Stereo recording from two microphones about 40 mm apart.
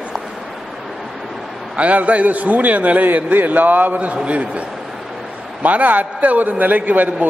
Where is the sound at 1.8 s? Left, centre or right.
Right.